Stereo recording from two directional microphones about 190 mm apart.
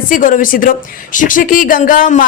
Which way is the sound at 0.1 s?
45° left (ahead or behind).